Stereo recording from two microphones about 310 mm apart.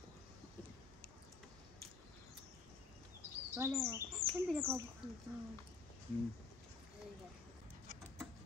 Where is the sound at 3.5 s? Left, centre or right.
Centre.